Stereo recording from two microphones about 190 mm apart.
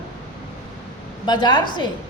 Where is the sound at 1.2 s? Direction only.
20° left (ahead or behind).